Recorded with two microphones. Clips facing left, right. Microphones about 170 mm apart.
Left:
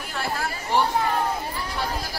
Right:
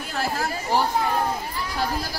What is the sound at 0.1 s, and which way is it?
Chatter, 40° right (ahead or behind).